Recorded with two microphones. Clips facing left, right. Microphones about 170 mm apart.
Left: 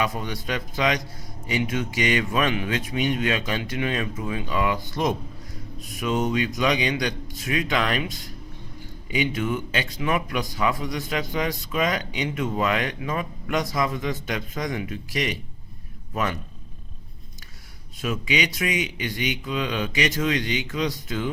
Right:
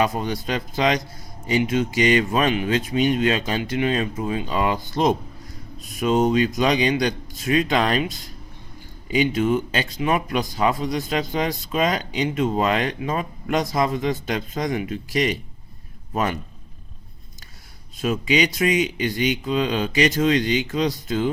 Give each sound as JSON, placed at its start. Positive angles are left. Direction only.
{"t": 0.0, "sound": "speech", "side_deg": -35}
{"t": 18.0, "sound": "speech", "side_deg": -35}